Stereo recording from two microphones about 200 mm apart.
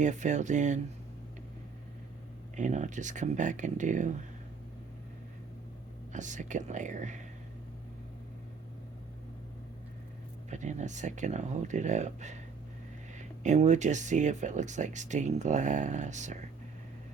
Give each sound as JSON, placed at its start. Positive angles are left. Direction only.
{"t": 0.0, "sound": "speech", "side_deg": -35}
{"t": 2.6, "sound": "speech", "side_deg": -35}
{"t": 6.1, "sound": "speech", "side_deg": -40}
{"t": 10.5, "sound": "speech", "side_deg": -35}